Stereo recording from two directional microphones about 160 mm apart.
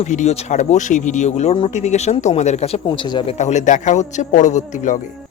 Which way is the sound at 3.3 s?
45° left (ahead or behind).